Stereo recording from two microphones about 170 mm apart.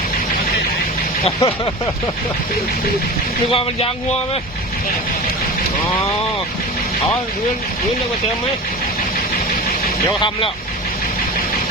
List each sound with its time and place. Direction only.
1.2 s speech: 35° left (ahead or behind)